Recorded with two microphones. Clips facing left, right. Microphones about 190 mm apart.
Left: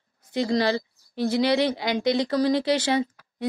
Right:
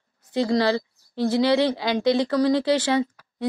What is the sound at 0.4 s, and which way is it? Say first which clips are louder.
A woman's voice: right 2 dB; 20° left (ahead or behind).